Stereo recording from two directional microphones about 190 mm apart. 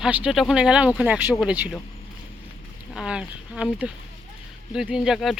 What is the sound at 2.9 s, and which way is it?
Speech, 5° right (ahead or behind).